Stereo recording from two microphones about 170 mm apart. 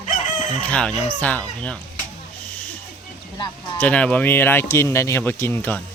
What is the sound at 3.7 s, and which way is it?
Speech, 10° left (ahead or behind).